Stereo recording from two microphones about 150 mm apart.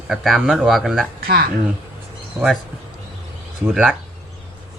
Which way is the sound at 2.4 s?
10° right (ahead or behind).